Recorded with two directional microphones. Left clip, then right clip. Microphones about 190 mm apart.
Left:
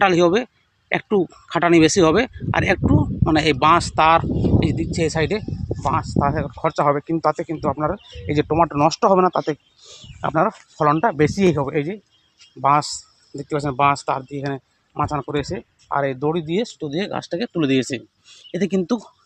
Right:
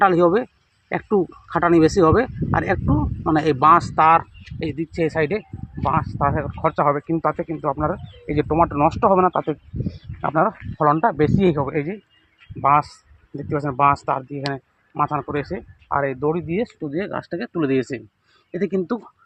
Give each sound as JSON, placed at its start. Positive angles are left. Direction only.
{"t": 0.0, "sound": "speech", "side_deg": 15}
{"t": 10.2, "sound": "speech", "side_deg": 45}
{"t": 14.9, "sound": "speech", "side_deg": 60}